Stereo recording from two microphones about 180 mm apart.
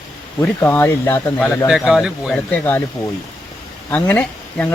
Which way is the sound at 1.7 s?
Centre (ahead or behind).